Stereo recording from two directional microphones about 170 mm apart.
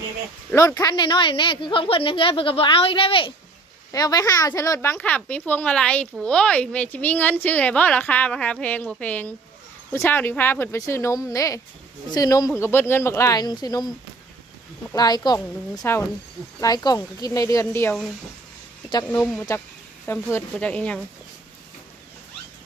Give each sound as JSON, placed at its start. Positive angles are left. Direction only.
{"t": 0.5, "sound": "a woman's voice", "side_deg": 20}
{"t": 14.9, "sound": "speech", "side_deg": 25}
{"t": 19.2, "sound": "speech", "side_deg": 5}